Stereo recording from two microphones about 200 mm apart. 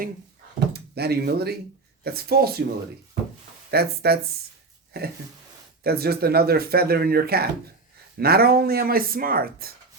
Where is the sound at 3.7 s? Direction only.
50° right (ahead or behind).